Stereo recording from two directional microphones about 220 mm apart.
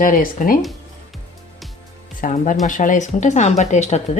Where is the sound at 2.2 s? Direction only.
35° left (ahead or behind).